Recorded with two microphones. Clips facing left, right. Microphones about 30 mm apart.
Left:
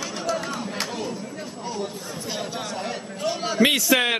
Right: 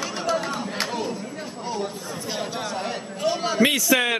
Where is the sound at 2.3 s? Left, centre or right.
Centre.